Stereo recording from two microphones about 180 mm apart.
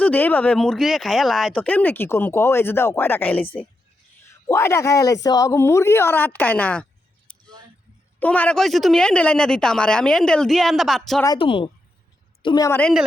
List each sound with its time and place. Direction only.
0.0 s speech: 10° left (ahead or behind)
7.3 s a sound: 10° left (ahead or behind)
8.2 s speech: 10° left (ahead or behind)
11.3 s a woman's voice: 30° left (ahead or behind)